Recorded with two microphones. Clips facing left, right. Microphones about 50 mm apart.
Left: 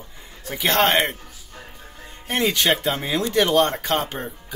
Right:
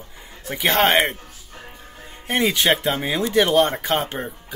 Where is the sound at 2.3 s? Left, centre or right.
Centre.